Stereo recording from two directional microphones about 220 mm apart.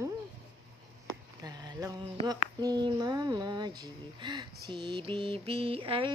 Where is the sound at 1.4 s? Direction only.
20° right (ahead or behind).